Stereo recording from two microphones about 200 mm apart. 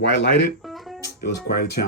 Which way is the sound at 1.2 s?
50° left (ahead or behind).